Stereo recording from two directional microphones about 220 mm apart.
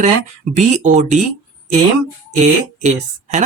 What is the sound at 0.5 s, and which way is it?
Speech, 30° right (ahead or behind).